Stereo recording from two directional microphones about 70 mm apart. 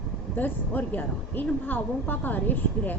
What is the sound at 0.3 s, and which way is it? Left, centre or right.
A woman's voice, left.